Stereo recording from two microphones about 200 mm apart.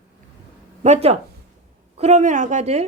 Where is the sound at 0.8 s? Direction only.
30° right (ahead or behind).